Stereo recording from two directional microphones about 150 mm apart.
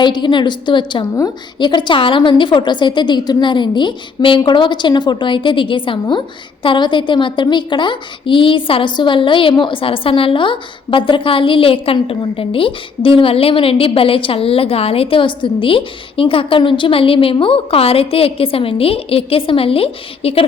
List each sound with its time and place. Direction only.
0.0 s a woman's voice: 30° left (ahead or behind)